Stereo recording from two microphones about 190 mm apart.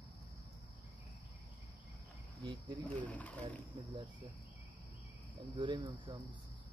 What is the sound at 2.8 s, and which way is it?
Speech, 10° left (ahead or behind).